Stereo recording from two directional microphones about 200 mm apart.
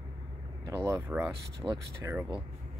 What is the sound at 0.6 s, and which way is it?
Speech, 15° right (ahead or behind).